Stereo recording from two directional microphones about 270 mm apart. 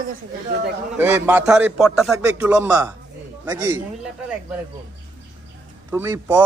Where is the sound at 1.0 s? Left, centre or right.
Centre.